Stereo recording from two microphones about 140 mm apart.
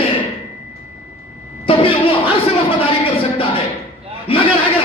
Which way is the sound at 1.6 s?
40° left (ahead or behind).